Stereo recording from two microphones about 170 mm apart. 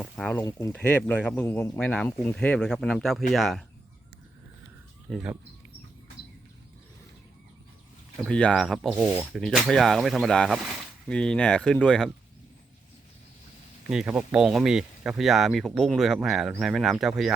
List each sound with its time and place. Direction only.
0.0 s a sound: 5° left (ahead or behind)
0.4 s speech: 15° left (ahead or behind); by 3.6 s centre (ahead or behind)
5.1 s speech: centre (ahead or behind)
8.2 s speech: 5° left (ahead or behind)
13.9 s speech: 5° right (ahead or behind)